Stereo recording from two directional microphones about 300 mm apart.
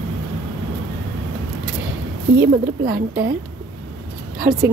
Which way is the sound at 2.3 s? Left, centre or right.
Right.